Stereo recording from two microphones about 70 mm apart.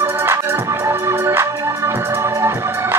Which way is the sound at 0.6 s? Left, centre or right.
Right.